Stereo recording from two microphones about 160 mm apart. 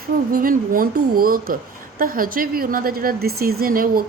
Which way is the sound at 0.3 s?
65° right (ahead or behind).